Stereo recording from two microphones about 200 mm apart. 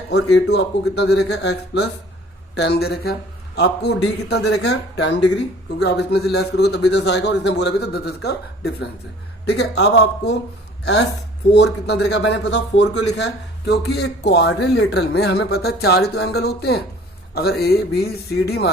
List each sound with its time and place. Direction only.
0.1 s speech: 60° left (ahead or behind)
11.5 s speech: 60° left (ahead or behind)